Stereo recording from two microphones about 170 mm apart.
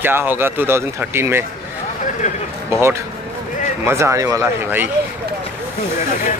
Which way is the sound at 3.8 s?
15° right (ahead or behind).